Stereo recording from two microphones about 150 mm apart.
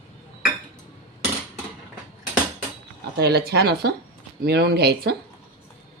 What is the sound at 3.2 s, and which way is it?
Speech, 90° right.